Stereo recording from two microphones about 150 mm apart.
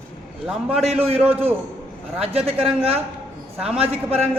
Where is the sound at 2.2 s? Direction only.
40° right (ahead or behind).